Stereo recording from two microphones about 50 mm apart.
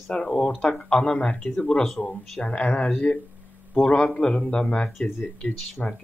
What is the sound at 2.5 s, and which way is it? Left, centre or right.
Speech, left.